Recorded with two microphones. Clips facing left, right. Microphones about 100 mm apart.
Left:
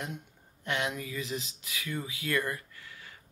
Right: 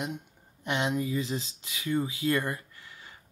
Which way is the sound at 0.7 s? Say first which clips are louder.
Right 4 dB; 25° right (ahead or behind).